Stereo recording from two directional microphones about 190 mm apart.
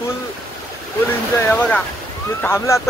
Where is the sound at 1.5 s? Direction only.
10° left (ahead or behind).